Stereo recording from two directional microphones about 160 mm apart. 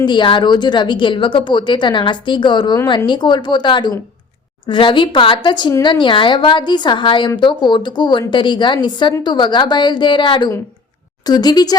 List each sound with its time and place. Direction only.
0.0 s speech: 30° left (ahead or behind)